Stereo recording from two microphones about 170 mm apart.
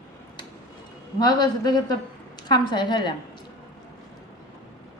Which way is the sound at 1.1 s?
25° left (ahead or behind).